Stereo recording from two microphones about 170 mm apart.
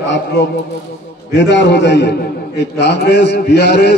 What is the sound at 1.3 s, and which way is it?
A man's voice, 90° left.